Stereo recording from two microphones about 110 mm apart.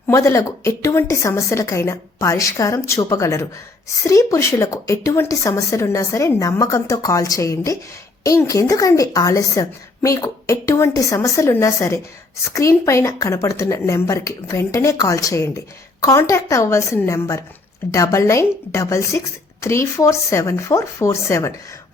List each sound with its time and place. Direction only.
0.1 s a woman's voice: 30° left (ahead or behind)